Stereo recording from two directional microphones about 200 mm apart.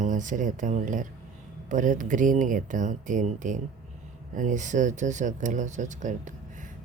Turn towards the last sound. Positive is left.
turn(degrees=-40)  # may be behind; listen again after turning